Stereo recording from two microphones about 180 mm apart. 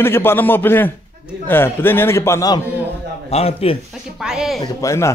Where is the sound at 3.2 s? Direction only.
35° left (ahead or behind).